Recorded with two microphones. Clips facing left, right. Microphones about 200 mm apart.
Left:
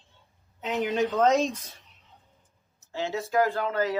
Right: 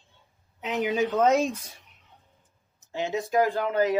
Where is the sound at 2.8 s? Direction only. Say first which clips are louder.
Right 2 dB; 15° right (ahead or behind).